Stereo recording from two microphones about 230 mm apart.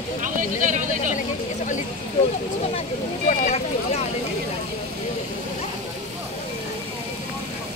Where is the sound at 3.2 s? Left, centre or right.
Left.